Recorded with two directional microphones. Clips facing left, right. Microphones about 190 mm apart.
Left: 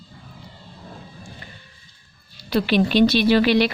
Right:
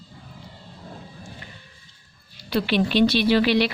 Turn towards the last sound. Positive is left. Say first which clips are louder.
# left 2 dB
turn(degrees=50)  # may be behind; listen again after turning